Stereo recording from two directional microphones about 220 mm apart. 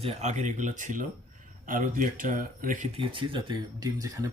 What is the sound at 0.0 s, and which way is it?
Speech, 30° right (ahead or behind).